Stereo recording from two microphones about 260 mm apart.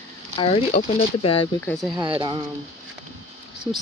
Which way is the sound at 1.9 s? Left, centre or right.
Centre.